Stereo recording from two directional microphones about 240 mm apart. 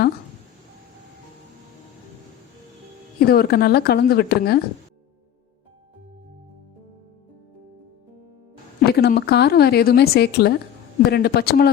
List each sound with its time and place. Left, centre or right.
3.2 s a woman's voice: left
8.8 s a woman's voice: left